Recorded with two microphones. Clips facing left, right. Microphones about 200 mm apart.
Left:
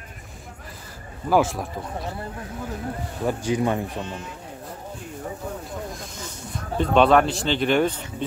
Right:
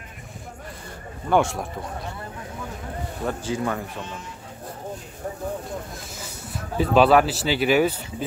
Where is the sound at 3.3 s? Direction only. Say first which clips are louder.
Left 4 dB; 15° left (ahead or behind).